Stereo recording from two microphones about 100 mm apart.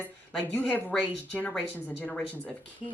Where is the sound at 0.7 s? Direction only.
15° left (ahead or behind).